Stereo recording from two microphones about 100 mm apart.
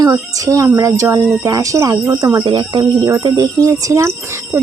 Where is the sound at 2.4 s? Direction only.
50° right (ahead or behind).